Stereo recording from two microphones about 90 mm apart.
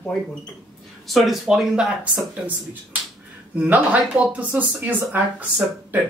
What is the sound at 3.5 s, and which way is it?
Speech, 15° right (ahead or behind).